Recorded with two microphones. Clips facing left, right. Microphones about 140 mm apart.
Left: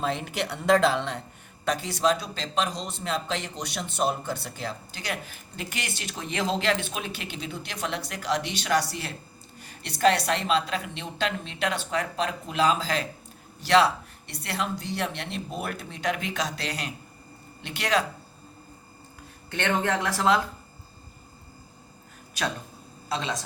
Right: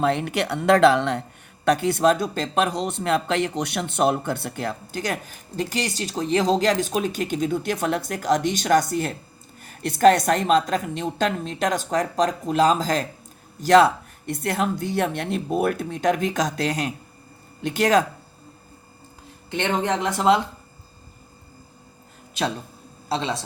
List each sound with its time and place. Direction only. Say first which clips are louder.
0.0 s speech: right 7 dB; 65° right (ahead or behind); by 18.0 s 45° right (ahead or behind)
19.5 s speech: right 3 dB; 20° right (ahead or behind)
23.0 s speech: right 5 dB; 30° right (ahead or behind)